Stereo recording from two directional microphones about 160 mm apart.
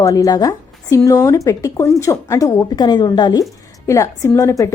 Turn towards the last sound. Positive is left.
turn(degrees=20)  # may be behind; listen again after turning